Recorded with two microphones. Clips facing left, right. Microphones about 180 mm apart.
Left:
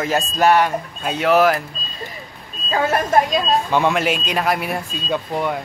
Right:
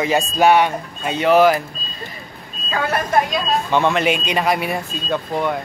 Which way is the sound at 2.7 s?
35° left (ahead or behind).